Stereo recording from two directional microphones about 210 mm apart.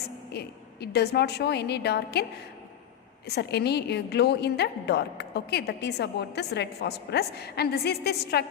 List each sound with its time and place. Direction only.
0.3 s a woman's voice: 50° left (ahead or behind)
3.2 s a woman's voice: 50° left (ahead or behind)